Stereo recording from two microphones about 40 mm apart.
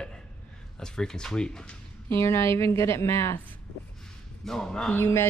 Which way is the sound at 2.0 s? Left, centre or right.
Left.